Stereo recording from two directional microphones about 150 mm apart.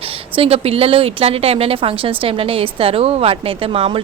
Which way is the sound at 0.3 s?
40° right (ahead or behind).